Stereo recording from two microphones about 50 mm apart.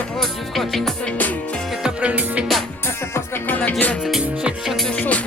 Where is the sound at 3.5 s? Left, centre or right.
Left.